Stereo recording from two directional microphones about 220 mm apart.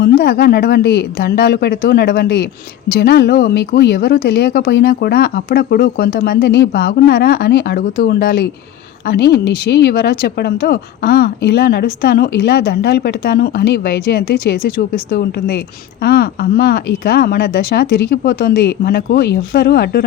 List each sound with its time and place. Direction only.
0.0 s speech: 45° left (ahead or behind)